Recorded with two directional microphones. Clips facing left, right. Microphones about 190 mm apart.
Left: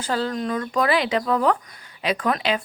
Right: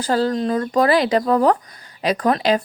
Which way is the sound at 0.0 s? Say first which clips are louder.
Right 6 dB; 40° right (ahead or behind).